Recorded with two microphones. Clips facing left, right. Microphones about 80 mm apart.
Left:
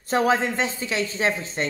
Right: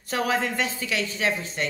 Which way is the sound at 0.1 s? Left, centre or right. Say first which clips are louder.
Left 4 dB; left.